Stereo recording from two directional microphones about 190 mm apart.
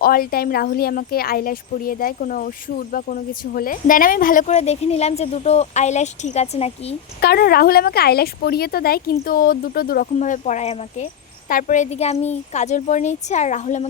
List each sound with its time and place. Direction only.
0.0 s speech: 50° left (ahead or behind); by 6.9 s 30° left (ahead or behind)
7.2 s speech: 55° left (ahead or behind); by 13.8 s 40° left (ahead or behind)